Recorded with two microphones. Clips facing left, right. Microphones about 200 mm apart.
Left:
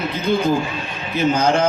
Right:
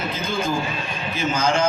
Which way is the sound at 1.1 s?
60° left (ahead or behind).